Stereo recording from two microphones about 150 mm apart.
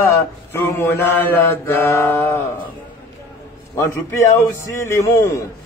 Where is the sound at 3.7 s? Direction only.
20° left (ahead or behind).